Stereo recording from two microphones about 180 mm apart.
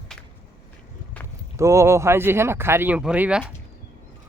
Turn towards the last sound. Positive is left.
turn(degrees=-5)  # may be behind; listen again after turning